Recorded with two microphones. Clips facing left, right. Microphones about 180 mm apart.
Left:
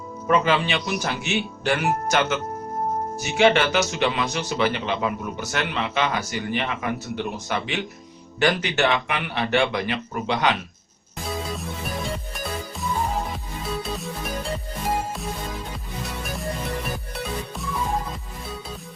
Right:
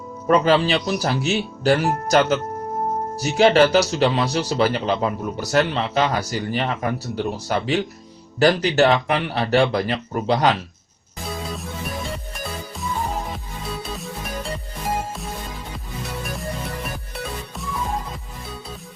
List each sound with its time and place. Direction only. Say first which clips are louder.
0.3 s speech: right 4 dB; 35° right (ahead or behind)
11.2 s music: even; centre (ahead or behind)